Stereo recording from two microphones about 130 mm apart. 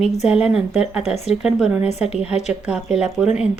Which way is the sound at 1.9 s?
55° left (ahead or behind).